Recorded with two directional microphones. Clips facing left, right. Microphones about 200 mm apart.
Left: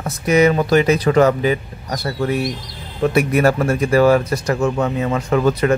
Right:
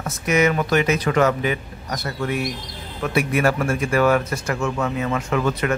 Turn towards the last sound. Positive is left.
turn(degrees=35)  # may be behind; listen again after turning